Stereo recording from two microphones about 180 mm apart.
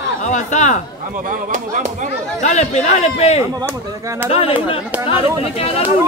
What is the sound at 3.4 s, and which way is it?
Speech, 20° right (ahead or behind).